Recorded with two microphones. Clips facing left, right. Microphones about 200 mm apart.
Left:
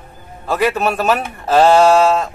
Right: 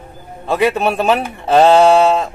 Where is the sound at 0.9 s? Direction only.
20° right (ahead or behind).